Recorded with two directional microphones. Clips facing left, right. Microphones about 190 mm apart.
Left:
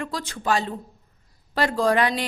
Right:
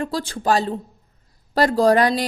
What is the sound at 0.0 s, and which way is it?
Speech, 30° right (ahead or behind).